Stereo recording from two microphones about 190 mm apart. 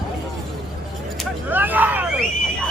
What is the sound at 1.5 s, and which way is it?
Hubbub, 10° right (ahead or behind).